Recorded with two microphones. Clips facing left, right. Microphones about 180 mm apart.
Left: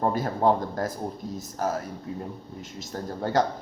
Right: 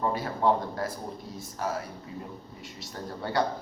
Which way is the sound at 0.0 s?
45° left (ahead or behind).